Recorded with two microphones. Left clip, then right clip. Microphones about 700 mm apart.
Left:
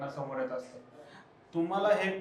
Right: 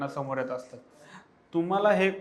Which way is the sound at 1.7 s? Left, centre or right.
Right.